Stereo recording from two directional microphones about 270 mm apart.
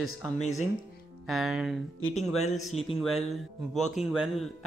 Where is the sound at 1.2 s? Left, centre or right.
Centre.